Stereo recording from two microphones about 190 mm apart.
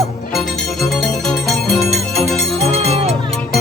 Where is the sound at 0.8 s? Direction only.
Centre (ahead or behind).